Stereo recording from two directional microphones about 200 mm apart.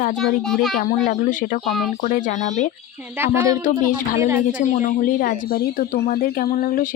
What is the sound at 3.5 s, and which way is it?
Speech, 15° right (ahead or behind).